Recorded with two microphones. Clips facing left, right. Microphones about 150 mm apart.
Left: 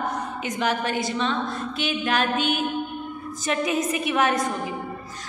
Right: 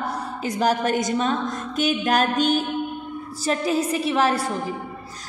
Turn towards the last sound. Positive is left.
turn(degrees=-30)  # may be behind; listen again after turning